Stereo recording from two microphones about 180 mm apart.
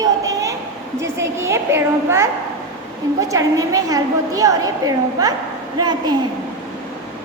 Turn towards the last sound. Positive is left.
turn(degrees=-25)  # may be behind; listen again after turning